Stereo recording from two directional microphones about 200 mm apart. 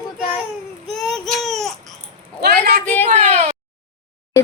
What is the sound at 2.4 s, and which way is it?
Speech, 50° right (ahead or behind).